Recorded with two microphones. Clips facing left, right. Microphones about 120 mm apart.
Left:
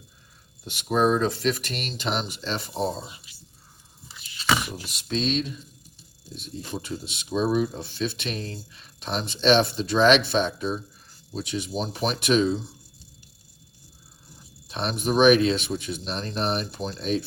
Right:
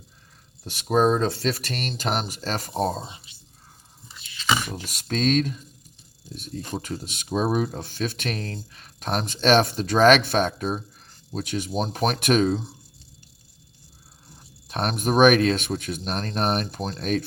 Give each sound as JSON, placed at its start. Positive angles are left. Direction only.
{"t": 0.6, "sound": "speech", "side_deg": -40}
{"t": 3.0, "sound": "a sound", "side_deg": -30}
{"t": 4.9, "sound": "speech", "side_deg": -45}
{"t": 14.3, "sound": "speech", "side_deg": -50}